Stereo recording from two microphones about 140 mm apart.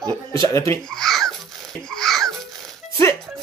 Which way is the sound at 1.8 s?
5° left (ahead or behind).